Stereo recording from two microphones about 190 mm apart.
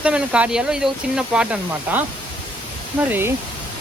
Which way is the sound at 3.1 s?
10° right (ahead or behind).